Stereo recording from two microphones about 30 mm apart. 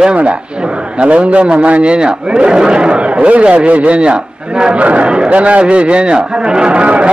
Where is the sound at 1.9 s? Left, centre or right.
Right.